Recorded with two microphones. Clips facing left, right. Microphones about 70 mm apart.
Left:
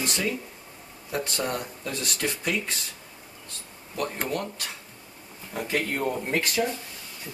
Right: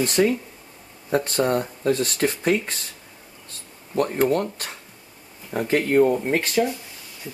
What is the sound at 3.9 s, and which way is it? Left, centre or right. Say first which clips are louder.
Speech: right 9 dB; right.